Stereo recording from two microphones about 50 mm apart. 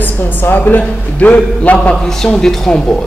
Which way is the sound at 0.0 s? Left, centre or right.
Left.